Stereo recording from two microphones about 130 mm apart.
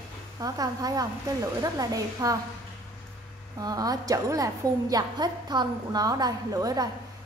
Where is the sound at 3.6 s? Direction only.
30° right (ahead or behind).